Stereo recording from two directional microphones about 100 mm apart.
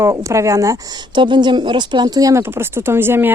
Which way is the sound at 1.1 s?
50° right (ahead or behind).